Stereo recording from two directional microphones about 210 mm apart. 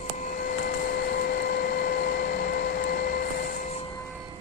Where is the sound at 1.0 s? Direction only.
45° left (ahead or behind).